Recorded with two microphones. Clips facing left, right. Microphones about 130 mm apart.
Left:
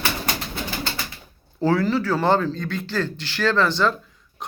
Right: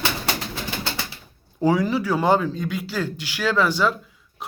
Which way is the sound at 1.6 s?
15° right (ahead or behind).